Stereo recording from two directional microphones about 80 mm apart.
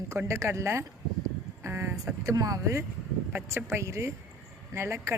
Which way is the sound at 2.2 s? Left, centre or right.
Right.